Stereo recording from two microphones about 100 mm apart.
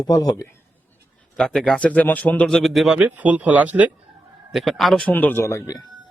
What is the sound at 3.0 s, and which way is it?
Speech, 15° right (ahead or behind).